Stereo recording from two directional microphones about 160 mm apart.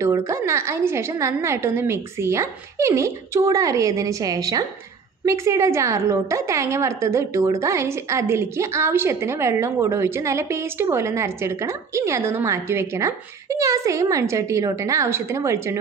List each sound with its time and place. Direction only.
0.0 s a woman's voice: 20° right (ahead or behind)